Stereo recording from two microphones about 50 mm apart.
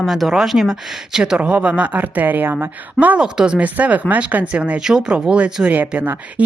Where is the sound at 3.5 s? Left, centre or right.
Right.